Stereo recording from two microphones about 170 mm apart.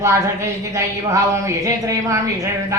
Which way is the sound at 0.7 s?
20° right (ahead or behind).